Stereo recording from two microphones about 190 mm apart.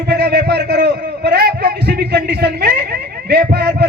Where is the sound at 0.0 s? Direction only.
55° right (ahead or behind).